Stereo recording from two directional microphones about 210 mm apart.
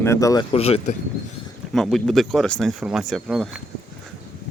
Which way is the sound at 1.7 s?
Centre (ahead or behind).